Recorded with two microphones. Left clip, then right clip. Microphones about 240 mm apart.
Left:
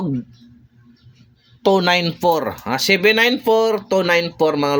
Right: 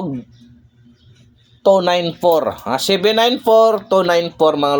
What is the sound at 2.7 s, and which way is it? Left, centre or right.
Speech, left.